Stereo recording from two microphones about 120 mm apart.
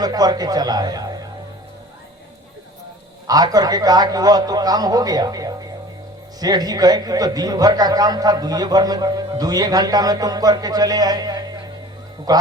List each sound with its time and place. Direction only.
0.0 s speech: 30° right (ahead or behind)
3.2 s a man's voice: 30° right (ahead or behind)